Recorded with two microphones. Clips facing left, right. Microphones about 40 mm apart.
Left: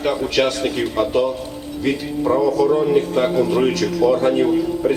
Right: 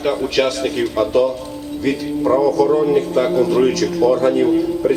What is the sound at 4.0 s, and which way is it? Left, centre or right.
Speech, left.